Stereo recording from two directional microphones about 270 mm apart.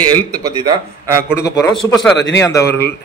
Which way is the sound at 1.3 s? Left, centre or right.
Centre.